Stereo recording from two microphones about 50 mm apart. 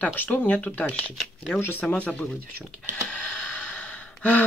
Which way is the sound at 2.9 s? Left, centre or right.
Left.